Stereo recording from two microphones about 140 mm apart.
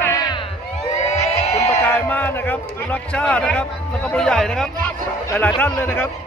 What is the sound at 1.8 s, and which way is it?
A man's voice, 10° left (ahead or behind).